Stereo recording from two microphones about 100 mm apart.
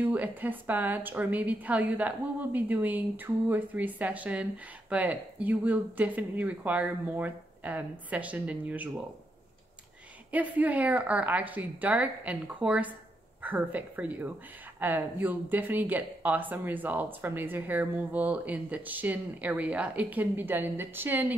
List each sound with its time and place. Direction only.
0.0 s a woman's voice: 15° right (ahead or behind)
10.3 s a woman's voice: 15° right (ahead or behind)